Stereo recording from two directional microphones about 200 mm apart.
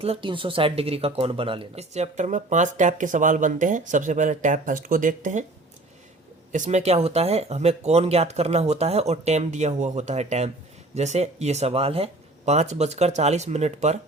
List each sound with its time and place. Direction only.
0.0 s speech: 25° right (ahead or behind)
6.5 s speech: 35° right (ahead or behind)